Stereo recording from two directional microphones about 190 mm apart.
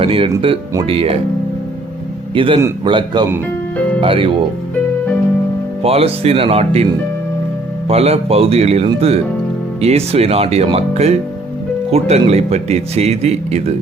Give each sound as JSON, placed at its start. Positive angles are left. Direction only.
{"t": 0.0, "sound": "a man's voice", "side_deg": -30}
{"t": 2.3, "sound": "a man's voice", "side_deg": -25}
{"t": 5.8, "sound": "speech", "side_deg": -30}
{"t": 7.9, "sound": "speech", "side_deg": -30}